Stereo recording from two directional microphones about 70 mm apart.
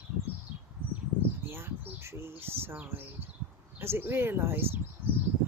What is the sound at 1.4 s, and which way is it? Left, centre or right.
Speech, right.